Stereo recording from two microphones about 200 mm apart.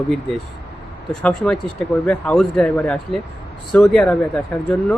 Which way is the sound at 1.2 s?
5° left (ahead or behind).